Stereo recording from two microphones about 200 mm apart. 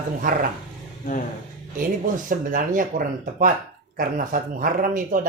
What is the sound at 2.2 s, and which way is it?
Speech, 45° right (ahead or behind).